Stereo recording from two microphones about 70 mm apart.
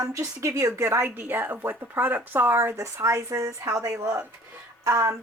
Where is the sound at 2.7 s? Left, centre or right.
Right.